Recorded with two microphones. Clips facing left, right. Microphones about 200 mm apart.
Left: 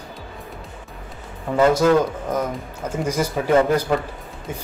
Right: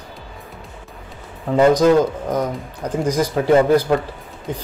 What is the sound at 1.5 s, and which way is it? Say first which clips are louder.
Speech: right 3 dB; 15° right (ahead or behind).